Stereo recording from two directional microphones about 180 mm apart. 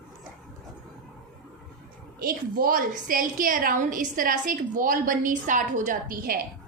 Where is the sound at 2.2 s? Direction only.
55° right (ahead or behind).